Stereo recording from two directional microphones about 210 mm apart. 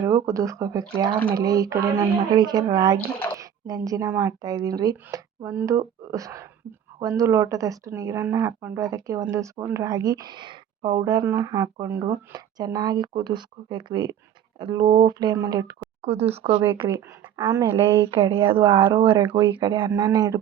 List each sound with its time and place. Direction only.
0.0 s speech: 15° right (ahead or behind)
16.0 s speech: 30° right (ahead or behind)
16.6 s speech: 10° right (ahead or behind)
18.1 s speech: 25° right (ahead or behind)